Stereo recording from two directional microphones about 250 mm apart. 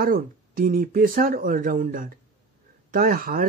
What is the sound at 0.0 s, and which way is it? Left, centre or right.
Speech, right.